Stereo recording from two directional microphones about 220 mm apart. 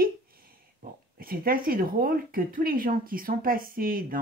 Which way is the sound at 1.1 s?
40° right (ahead or behind).